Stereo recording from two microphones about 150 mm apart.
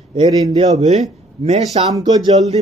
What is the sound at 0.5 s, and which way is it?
Speech, 50° right (ahead or behind).